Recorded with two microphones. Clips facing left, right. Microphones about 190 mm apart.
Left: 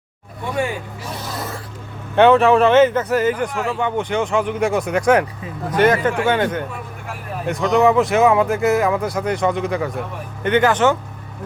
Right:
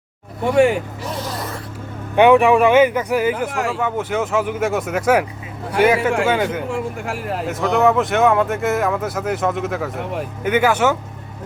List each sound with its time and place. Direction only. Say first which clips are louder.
0.4 s speech: right 8 dB; 70° right (ahead or behind)
2.1 s speech: even; 15° right (ahead or behind)
6.7 s speech: right 8 dB; 85° right
7.4 s speech: left 1 dB; 5° right (ahead or behind)